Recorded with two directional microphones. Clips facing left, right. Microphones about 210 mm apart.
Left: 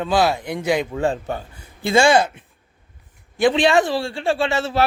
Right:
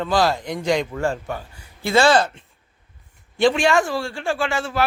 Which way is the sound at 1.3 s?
20° left (ahead or behind).